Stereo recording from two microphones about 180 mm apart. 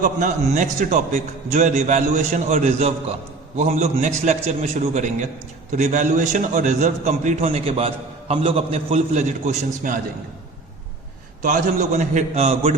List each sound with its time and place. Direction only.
0.0 s a man's voice: 45° right (ahead or behind)
11.4 s a man's voice: 45° right (ahead or behind)